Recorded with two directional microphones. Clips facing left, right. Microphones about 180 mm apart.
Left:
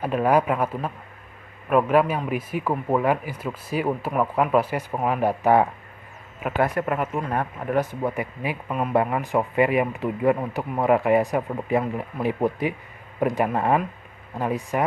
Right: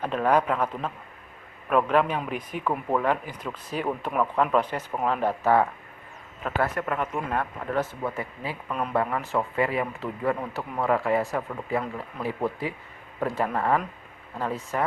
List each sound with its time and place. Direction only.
0.0 s speech: 10° left (ahead or behind)